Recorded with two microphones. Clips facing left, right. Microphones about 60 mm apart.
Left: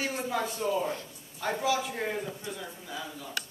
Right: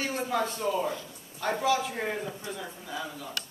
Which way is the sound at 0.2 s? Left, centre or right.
Centre.